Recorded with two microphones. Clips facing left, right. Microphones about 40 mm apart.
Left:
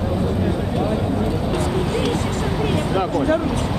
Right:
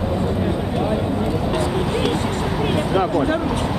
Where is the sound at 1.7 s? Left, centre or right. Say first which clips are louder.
Even; centre.